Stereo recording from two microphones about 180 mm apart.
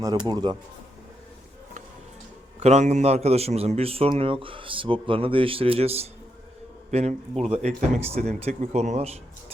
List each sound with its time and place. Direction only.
0.3 s speech: 25° right (ahead or behind)
2.6 s a man's voice: 40° right (ahead or behind)